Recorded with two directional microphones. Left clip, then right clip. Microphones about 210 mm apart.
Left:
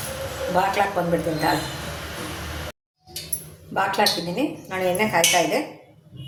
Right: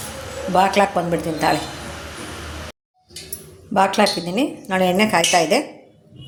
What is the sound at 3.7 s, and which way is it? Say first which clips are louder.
Speech: right 4 dB; 40° right (ahead or behind).